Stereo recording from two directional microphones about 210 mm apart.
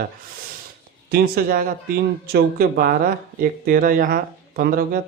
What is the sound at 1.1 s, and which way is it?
Speech, 45° right (ahead or behind).